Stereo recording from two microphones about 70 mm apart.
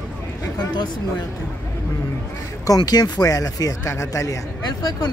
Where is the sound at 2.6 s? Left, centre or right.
Left.